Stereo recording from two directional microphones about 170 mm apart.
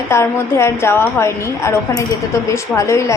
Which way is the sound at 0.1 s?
15° left (ahead or behind).